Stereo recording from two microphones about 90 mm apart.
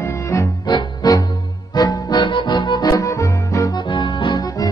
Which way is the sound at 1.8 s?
50° left (ahead or behind).